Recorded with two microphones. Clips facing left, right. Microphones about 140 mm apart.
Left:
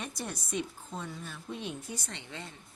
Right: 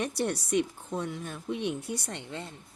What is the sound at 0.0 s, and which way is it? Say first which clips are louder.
Speech: right 9 dB; 70° right (ahead or behind).